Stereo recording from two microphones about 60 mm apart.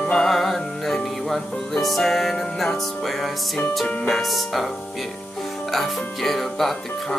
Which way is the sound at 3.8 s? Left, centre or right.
Centre.